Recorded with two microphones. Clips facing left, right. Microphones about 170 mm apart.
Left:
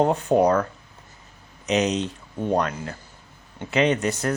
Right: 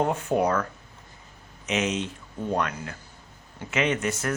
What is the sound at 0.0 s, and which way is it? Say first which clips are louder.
Speech: left 5 dB; 35° left (ahead or behind).